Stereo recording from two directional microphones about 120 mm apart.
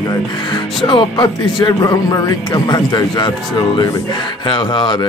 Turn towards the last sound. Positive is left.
turn(degrees=40)  # may be behind; listen again after turning